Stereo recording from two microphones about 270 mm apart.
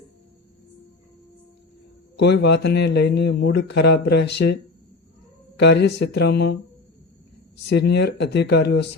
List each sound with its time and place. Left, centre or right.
2.2 s speech: left
5.5 s speech: left